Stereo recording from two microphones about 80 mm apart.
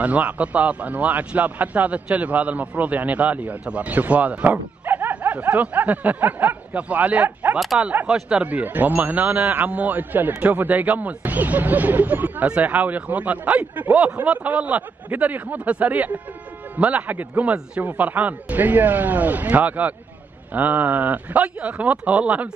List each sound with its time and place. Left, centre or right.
0.0 s a man's voice: centre
7.5 s speech: centre
7.8 s a man's voice: right